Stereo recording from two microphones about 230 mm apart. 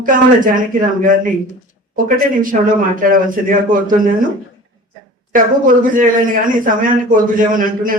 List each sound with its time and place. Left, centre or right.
0.0 s a man's voice: right
5.3 s a man's voice: right